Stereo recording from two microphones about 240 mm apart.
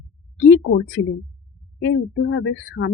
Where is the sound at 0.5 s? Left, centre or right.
Left.